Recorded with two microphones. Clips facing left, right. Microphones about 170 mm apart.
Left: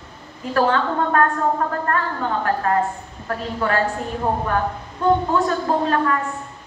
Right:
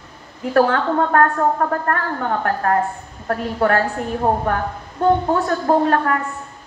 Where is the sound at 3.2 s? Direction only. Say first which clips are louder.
Right 5 dB; 55° right (ahead or behind).